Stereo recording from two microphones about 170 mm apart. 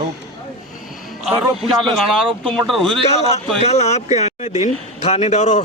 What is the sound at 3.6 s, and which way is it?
Speech, 40° left (ahead or behind).